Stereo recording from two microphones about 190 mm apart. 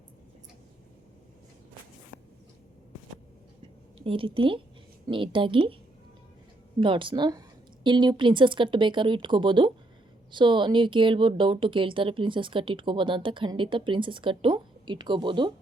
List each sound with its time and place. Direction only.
3.9 s a woman's voice: 30° right (ahead or behind)
6.7 s speech: 25° right (ahead or behind)